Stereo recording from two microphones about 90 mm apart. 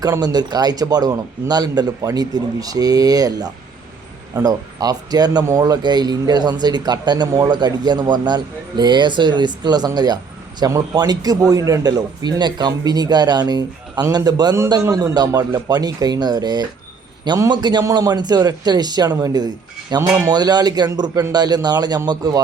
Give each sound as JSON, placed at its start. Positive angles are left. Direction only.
{"t": 0.0, "sound": "a man's voice", "side_deg": -45}
{"t": 14.8, "sound": "a man's voice", "side_deg": -35}
{"t": 20.0, "sound": "a man's voice", "side_deg": -30}
{"t": 20.3, "sound": "a man's voice", "side_deg": -50}